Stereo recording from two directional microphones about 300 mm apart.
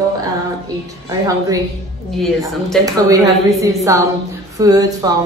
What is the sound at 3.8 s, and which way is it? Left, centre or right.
A woman's voice, centre.